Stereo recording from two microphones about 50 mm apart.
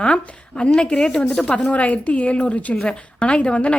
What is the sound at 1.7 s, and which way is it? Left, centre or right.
A woman's voice, left.